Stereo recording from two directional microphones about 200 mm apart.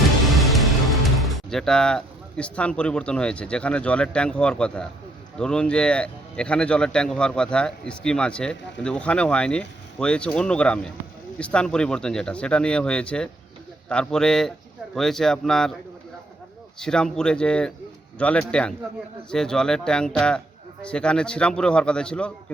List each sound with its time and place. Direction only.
0.3 s speech: centre (ahead or behind)
16.8 s speech: 5° left (ahead or behind)